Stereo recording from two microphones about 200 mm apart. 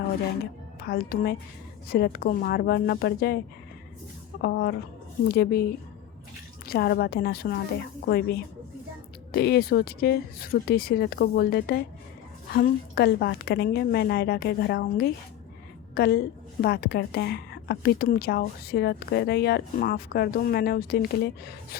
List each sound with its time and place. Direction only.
0.8 s a woman's voice: 50° left (ahead or behind)
6.7 s a woman's voice: 50° left (ahead or behind)